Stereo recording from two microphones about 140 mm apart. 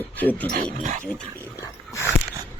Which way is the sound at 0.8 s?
60° right (ahead or behind).